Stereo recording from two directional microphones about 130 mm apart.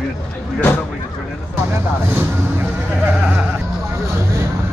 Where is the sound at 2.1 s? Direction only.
15° right (ahead or behind).